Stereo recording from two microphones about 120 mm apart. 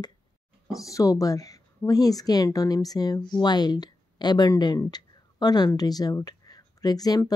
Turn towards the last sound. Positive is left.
turn(degrees=30)  # may be behind; listen again after turning